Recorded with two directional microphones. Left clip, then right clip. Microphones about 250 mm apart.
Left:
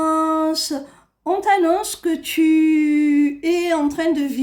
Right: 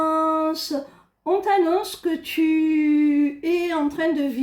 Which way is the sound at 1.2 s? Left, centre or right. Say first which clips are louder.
Left 3 dB; left.